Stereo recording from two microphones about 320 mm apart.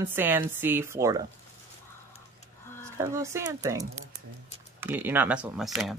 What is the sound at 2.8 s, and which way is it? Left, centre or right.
Speech, centre.